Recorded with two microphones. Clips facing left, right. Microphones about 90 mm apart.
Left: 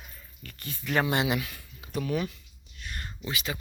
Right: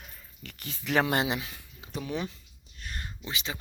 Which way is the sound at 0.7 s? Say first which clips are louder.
Right 1 dB; 90° right.